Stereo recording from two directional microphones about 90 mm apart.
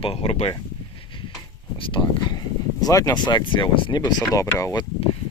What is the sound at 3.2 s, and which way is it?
Speech, 60° left (ahead or behind).